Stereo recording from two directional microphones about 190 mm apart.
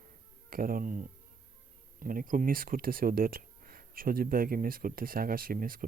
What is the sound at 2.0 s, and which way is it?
Speech, 45° right (ahead or behind).